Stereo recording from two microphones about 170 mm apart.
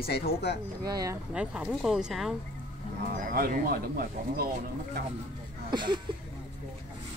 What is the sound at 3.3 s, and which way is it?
Speech, 60° right (ahead or behind).